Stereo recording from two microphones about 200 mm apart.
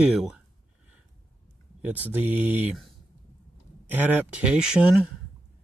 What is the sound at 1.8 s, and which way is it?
Speech, 10° right (ahead or behind).